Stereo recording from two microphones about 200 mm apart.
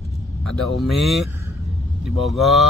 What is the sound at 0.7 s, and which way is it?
Speech, centre (ahead or behind).